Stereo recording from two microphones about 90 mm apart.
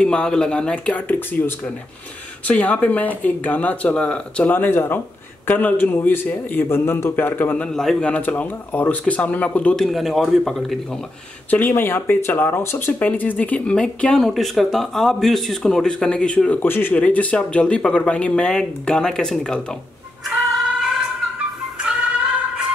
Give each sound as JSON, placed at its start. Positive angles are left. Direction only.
{"t": 0.0, "sound": "speech", "side_deg": 10}
{"t": 9.8, "sound": "speech", "side_deg": 0}
{"t": 11.5, "sound": "speech", "side_deg": 20}
{"t": 20.2, "sound": "a sound", "side_deg": 0}
{"t": 21.7, "sound": "music", "side_deg": -10}